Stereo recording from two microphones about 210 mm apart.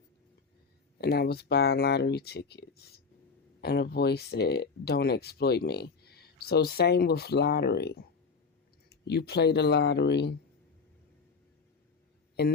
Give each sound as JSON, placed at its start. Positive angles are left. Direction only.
{"t": 1.0, "sound": "speech", "side_deg": 50}